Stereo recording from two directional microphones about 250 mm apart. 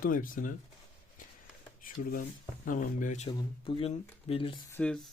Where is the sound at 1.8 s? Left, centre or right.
Left.